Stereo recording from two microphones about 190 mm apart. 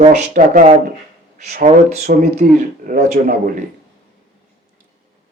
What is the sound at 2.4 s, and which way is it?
A man's voice, 50° right (ahead or behind).